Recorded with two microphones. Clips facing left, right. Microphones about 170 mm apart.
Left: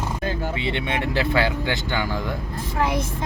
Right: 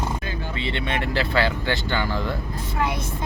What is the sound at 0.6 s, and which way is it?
Speech, 15° left (ahead or behind).